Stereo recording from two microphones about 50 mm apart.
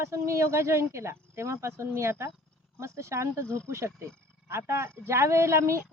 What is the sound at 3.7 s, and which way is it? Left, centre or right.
Speech, right.